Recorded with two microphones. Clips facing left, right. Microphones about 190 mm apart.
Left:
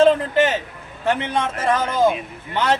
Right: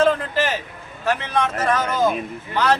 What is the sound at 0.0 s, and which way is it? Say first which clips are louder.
A man's voice: left 4 dB; 25° left (ahead or behind).